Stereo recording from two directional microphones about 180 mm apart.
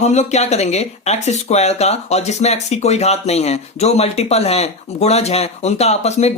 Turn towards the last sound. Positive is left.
turn(degrees=35)  # may be behind; listen again after turning